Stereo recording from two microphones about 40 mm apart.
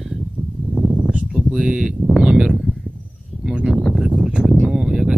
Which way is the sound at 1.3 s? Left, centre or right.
Right.